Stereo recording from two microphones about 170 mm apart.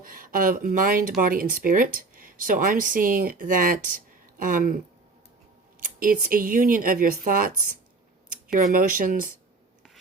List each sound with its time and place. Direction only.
0.0 s speech: 55° right (ahead or behind)
5.8 s speech: 55° right (ahead or behind)
8.5 s speech: 50° right (ahead or behind)